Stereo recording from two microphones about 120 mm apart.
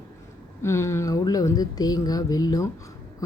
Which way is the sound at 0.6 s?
25° left (ahead or behind).